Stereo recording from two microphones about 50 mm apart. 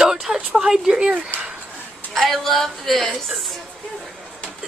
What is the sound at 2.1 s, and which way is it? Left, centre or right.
A woman's voice, centre.